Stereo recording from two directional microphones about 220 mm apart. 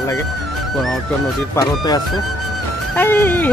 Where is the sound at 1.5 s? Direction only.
20° left (ahead or behind).